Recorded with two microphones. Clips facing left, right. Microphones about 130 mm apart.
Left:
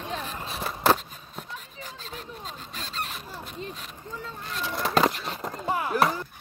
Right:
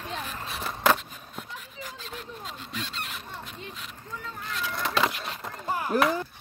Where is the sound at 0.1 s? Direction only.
35° left (ahead or behind).